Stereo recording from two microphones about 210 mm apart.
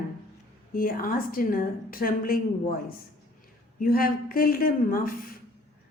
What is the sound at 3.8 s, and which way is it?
A woman's voice, 45° left (ahead or behind).